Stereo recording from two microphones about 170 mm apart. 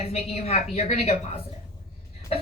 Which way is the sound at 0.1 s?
40° left (ahead or behind).